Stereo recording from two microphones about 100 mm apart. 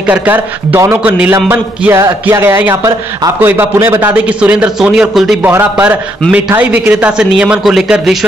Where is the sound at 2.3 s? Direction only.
25° right (ahead or behind).